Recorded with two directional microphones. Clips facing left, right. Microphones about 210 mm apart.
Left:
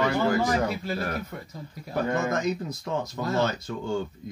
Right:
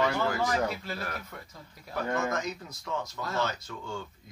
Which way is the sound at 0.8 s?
35° left (ahead or behind).